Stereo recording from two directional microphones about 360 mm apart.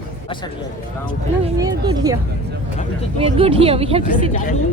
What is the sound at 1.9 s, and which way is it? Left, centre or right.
Speech, centre.